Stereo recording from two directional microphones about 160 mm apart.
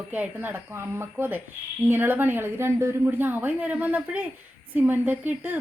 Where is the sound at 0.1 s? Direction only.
10° right (ahead or behind).